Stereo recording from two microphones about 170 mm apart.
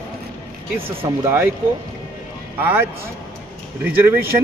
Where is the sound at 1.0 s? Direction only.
15° right (ahead or behind).